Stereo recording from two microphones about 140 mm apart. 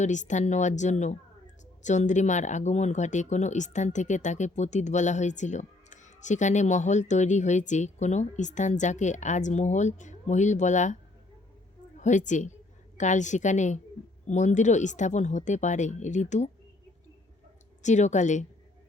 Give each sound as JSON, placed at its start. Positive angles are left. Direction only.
{"t": 0.0, "sound": "speech", "side_deg": 60}
{"t": 11.9, "sound": "a woman's voice", "side_deg": 60}
{"t": 17.8, "sound": "speech", "side_deg": 60}